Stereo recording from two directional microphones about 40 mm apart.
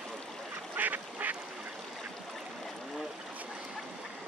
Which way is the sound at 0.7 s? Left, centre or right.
Right.